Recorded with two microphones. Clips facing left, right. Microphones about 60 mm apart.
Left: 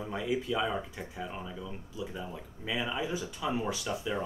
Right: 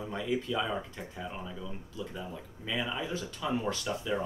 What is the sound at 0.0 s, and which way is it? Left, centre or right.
Speech, centre.